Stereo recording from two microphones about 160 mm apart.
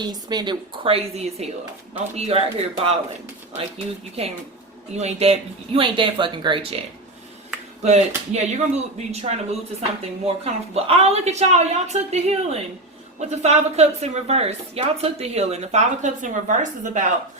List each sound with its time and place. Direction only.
0.0 s a woman's voice: 25° right (ahead or behind)
4.2 s a woman's voice: 40° right (ahead or behind)
7.8 s a woman's voice: 45° right (ahead or behind)